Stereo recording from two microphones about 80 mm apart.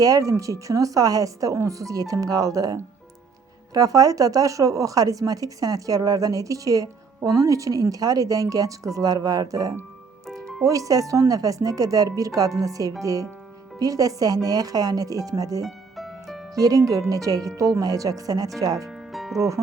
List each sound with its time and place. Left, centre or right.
0.0 s speech: right
3.8 s speech: right
10.2 s music: centre
10.7 s speech: right
15.6 s music: centre
16.6 s speech: right
18.9 s music: centre
19.4 s speech: right